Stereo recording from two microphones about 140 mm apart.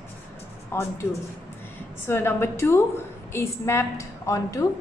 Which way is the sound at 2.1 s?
15° left (ahead or behind).